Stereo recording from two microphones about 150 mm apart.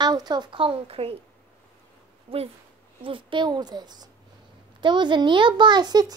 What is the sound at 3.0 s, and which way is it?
A child's voice, 35° right (ahead or behind).